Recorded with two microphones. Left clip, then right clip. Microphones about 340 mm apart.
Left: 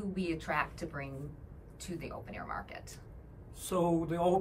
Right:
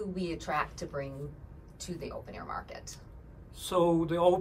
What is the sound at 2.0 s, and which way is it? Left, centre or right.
Speech, centre.